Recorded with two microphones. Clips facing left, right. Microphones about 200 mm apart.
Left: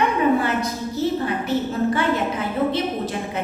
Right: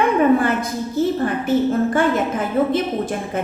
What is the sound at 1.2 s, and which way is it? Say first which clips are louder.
A woman's voice: right 5 dB; 50° right (ahead or behind).